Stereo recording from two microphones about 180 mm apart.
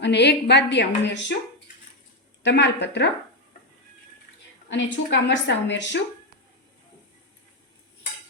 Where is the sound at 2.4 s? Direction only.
75° left (ahead or behind).